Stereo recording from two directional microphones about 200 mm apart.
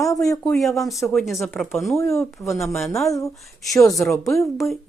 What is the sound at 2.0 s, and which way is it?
Speech, 15° left (ahead or behind).